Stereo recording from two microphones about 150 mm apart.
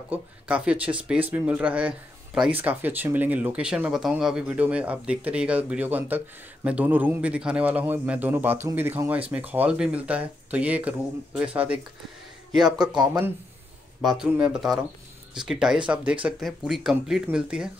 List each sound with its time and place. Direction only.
0.1 s speech: 10° right (ahead or behind)
12.6 s speech: 25° right (ahead or behind)
14.0 s speech: 5° right (ahead or behind)